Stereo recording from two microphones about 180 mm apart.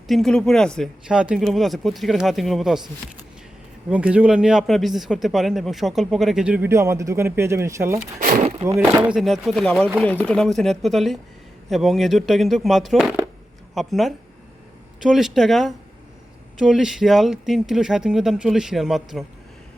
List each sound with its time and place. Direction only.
0.1 s speech: 5° left (ahead or behind)
3.8 s speech: 5° right (ahead or behind)
8.2 s speech: 45° right (ahead or behind)
8.6 s speech: 15° right (ahead or behind)